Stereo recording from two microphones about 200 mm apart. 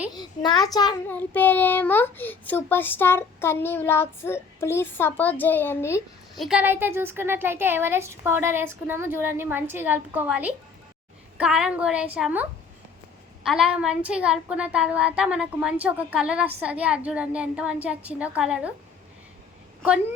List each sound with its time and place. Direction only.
0.1 s a child's voice: 20° left (ahead or behind)
1.0 s a child's voice: 10° left (ahead or behind)
6.3 s a woman's voice: centre (ahead or behind)